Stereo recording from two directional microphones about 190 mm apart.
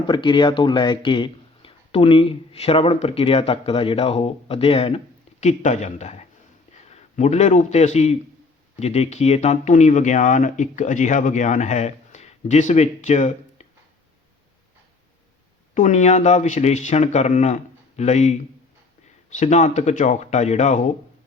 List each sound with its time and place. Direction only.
0.1 s a man's voice: 25° left (ahead or behind)
15.7 s speech: 40° left (ahead or behind)